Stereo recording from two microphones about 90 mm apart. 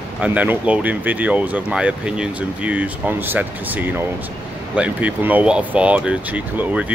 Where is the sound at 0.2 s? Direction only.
15° right (ahead or behind).